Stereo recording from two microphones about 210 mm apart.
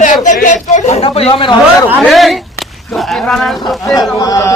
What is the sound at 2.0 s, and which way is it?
Speech, centre (ahead or behind).